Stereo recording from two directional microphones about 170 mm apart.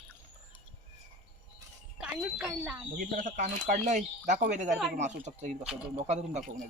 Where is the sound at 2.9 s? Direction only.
55° right (ahead or behind).